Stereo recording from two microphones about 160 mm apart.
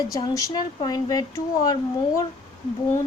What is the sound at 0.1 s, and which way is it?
A woman's voice, 20° left (ahead or behind).